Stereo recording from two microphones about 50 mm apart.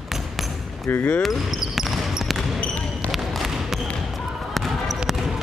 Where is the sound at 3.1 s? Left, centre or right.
Centre.